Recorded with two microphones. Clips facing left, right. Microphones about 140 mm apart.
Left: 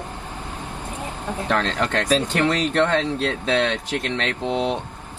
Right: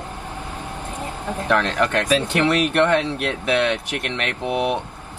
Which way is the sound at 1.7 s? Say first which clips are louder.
Right 2 dB; 15° right (ahead or behind).